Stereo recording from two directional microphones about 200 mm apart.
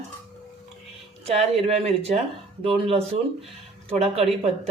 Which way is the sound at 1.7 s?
30° right (ahead or behind).